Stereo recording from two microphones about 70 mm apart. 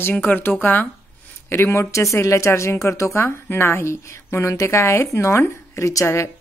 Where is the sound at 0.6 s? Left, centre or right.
Left.